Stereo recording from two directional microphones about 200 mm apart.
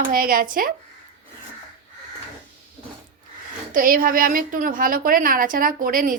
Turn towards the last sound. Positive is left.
turn(degrees=-45)  # may be behind; listen again after turning